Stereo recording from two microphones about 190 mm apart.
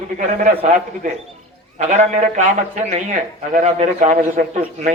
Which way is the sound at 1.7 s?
40° right (ahead or behind).